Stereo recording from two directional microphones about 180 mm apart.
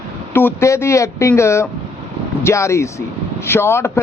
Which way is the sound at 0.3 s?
15° left (ahead or behind).